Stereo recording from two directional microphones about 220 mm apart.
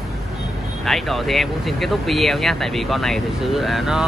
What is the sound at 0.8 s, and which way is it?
Speech, centre (ahead or behind).